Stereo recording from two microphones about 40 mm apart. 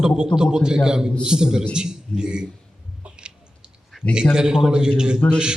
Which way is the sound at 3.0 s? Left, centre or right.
Right.